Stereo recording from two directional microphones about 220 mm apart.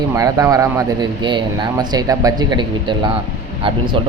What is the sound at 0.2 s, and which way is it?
Speech, 15° right (ahead or behind).